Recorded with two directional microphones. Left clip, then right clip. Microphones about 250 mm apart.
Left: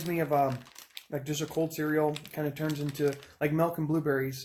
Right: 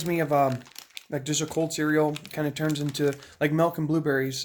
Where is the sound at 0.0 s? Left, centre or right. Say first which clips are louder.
Right 4 dB; right.